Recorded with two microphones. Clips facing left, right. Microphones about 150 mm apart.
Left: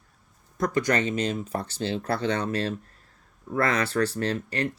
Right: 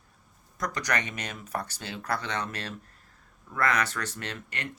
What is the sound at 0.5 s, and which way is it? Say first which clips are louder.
Speech: left 7 dB; 25° left (ahead or behind).